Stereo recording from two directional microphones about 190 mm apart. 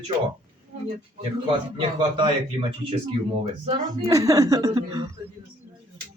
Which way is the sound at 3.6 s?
30° right (ahead or behind).